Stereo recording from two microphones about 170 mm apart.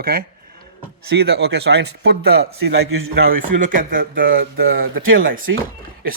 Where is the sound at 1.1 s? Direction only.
80° right.